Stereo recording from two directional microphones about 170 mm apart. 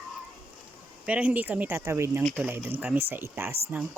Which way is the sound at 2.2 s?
Centre (ahead or behind).